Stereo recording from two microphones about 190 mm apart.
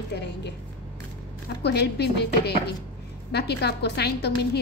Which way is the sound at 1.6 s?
60° left (ahead or behind).